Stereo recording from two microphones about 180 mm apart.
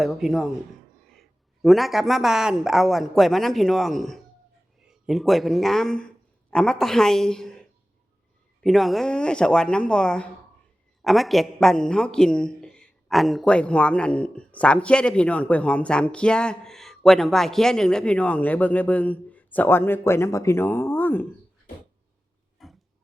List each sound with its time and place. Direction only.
0.0 s speech: centre (ahead or behind)
1.6 s speech: centre (ahead or behind)
8.6 s speech: centre (ahead or behind)
22.6 s a sound: centre (ahead or behind)